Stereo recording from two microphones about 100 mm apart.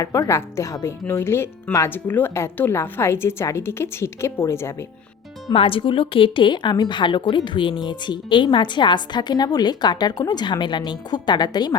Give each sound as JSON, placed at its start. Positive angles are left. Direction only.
{"t": 0.0, "sound": "speech", "side_deg": 30}
{"t": 5.5, "sound": "a woman's voice", "side_deg": 65}